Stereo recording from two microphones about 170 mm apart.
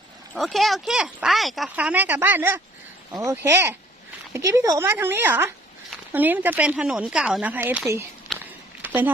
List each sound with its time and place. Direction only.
0.3 s speech: centre (ahead or behind)
8.3 s walk: centre (ahead or behind)
8.8 s a sound: 10° right (ahead or behind)